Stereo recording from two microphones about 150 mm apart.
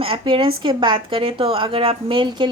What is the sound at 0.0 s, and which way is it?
A woman's voice, 35° right (ahead or behind).